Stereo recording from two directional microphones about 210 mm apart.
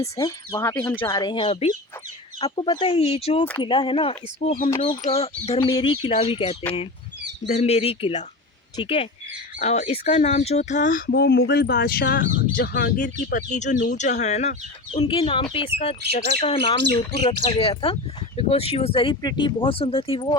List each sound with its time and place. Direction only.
0.0 s speech: 15° left (ahead or behind)